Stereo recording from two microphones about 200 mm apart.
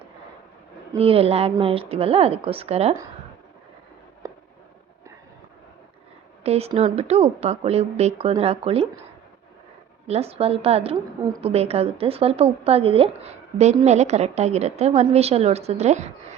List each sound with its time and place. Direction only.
0.9 s a woman's voice: 30° right (ahead or behind)
4.2 s a sound: 15° right (ahead or behind)
6.4 s a woman's voice: 30° right (ahead or behind)
10.1 s a woman's voice: 30° right (ahead or behind)